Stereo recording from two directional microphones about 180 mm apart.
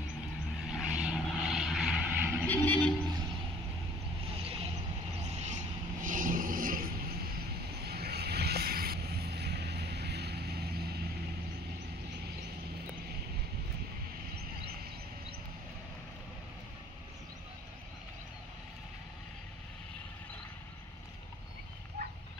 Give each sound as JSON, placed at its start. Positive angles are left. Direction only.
{"t": 0.7, "sound": "vehicle", "side_deg": -5}
{"t": 2.4, "sound": "vehicle", "side_deg": 10}
{"t": 5.2, "sound": "vehicle", "side_deg": -40}
{"t": 7.8, "sound": "vehicle", "side_deg": -60}
{"t": 22.0, "sound": "horse", "side_deg": -60}